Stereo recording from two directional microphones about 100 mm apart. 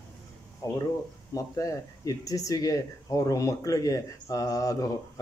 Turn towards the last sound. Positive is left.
turn(degrees=35)  # may be behind; listen again after turning